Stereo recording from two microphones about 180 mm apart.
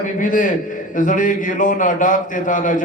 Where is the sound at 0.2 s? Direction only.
45° left (ahead or behind).